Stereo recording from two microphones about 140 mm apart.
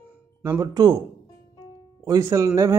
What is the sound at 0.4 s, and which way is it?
Speech, 30° right (ahead or behind).